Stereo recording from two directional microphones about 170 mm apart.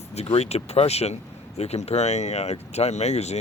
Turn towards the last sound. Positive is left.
turn(degrees=40)  # may be behind; listen again after turning